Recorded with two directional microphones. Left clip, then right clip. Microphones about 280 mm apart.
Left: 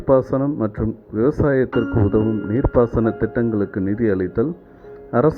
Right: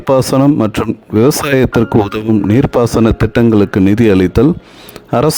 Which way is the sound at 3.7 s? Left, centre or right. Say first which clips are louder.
Right 10 dB; right.